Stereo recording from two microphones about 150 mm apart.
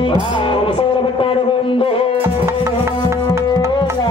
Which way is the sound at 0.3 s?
35° left (ahead or behind).